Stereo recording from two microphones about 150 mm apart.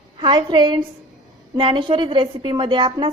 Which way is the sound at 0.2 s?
30° right (ahead or behind).